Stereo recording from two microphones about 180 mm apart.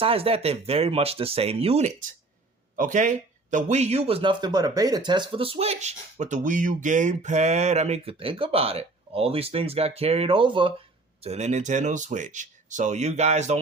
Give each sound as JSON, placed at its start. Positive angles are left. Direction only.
{"t": 0.0, "sound": "a man's voice", "side_deg": -30}